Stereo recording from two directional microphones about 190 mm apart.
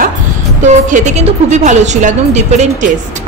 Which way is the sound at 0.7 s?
40° right (ahead or behind).